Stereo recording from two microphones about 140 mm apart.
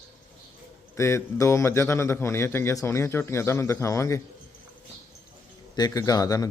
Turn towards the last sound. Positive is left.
turn(degrees=25)  # may be behind; listen again after turning